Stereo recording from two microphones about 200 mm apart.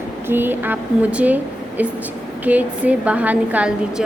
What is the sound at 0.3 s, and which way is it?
A woman's voice, 10° right (ahead or behind).